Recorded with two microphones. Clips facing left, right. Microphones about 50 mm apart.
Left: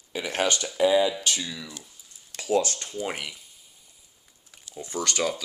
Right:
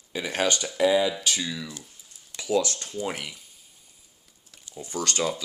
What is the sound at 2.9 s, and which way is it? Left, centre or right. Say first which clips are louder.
Speech: even; centre.